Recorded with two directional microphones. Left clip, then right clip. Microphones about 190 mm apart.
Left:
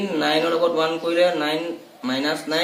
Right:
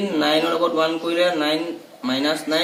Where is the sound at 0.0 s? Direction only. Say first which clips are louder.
Right 1 dB; centre (ahead or behind).